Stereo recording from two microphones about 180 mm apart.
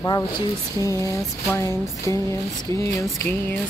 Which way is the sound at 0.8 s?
15° left (ahead or behind).